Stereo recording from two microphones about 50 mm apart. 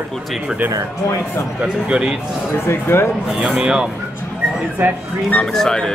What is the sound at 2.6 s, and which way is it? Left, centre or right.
Speech, left.